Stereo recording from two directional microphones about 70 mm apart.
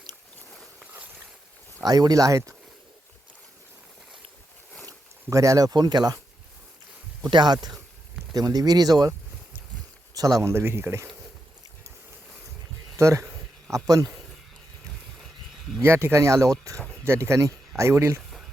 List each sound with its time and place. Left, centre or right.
0.8 s boat: right
1.8 s speech: right
5.3 s speech: right
7.2 s speech: right
8.4 s speech: right
10.2 s speech: right
10.5 s speech: right
13.0 s speech: right
15.8 s speech: right
17.0 s speech: right
18.2 s a sound: centre